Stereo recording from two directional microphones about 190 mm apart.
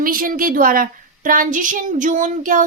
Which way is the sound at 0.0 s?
50° right (ahead or behind).